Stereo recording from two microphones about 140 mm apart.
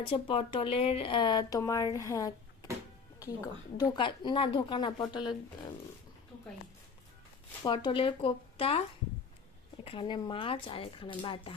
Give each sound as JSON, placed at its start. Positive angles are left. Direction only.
{"t": 0.0, "sound": "speech", "side_deg": 40}
{"t": 7.6, "sound": "speech", "side_deg": 35}
{"t": 9.8, "sound": "speech", "side_deg": 40}